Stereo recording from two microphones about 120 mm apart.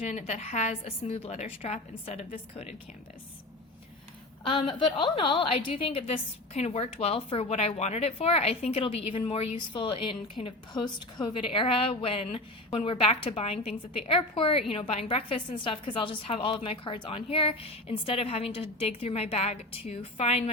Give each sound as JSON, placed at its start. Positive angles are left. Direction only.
{"t": 0.0, "sound": "a woman's voice", "side_deg": 70}
{"t": 4.4, "sound": "a woman's voice", "side_deg": 45}
{"t": 11.4, "sound": "a woman's voice", "side_deg": 50}